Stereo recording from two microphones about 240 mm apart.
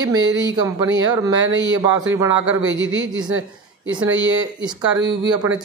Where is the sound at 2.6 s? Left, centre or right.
Right.